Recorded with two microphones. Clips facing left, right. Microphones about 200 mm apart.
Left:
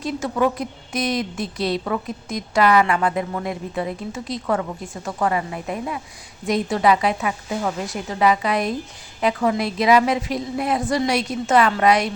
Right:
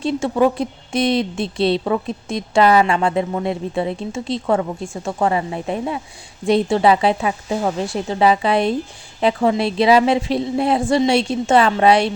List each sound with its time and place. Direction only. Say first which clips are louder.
0.0 s a woman's voice: right 5 dB; 30° right (ahead or behind)